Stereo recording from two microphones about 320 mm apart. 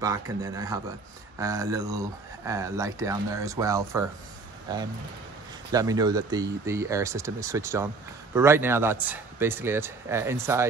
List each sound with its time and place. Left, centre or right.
0.0 s speech: centre